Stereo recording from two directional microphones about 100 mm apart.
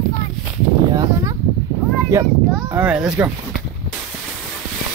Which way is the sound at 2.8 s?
10° right (ahead or behind).